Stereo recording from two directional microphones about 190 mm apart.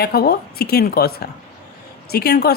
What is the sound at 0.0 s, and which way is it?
Speech, 55° left (ahead or behind).